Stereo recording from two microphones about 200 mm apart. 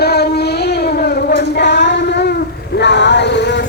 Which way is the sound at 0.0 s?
55° left (ahead or behind).